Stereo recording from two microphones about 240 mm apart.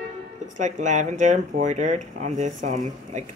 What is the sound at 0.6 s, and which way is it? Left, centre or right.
Speech, right.